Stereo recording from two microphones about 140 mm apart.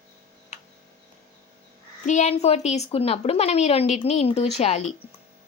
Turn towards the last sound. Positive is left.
turn(degrees=50)  # may be behind; listen again after turning